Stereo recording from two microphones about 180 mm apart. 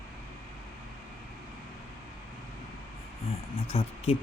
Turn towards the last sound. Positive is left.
turn(degrees=35)  # may be behind; listen again after turning